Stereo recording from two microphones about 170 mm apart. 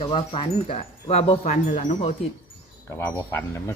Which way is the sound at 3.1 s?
15° left (ahead or behind).